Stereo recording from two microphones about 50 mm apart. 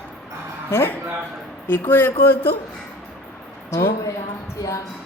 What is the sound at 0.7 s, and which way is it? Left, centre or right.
Speech, left.